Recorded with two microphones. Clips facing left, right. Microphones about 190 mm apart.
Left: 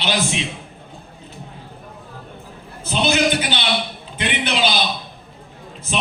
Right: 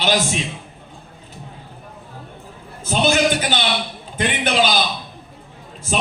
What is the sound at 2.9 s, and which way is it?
A man's voice, 45° right (ahead or behind).